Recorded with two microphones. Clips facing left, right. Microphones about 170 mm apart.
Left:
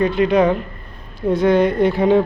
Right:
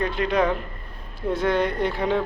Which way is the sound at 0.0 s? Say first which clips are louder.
Left 7 dB; 5° left (ahead or behind).